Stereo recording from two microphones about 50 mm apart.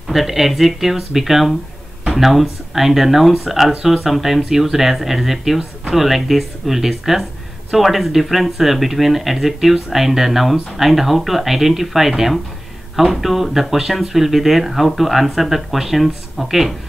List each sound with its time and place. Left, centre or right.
0.1 s speech: centre